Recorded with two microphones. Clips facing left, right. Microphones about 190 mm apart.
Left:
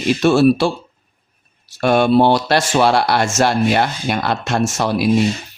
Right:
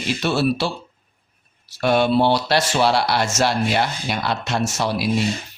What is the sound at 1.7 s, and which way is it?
Speech, 50° left (ahead or behind).